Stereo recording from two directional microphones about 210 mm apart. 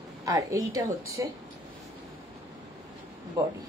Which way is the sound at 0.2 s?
15° right (ahead or behind).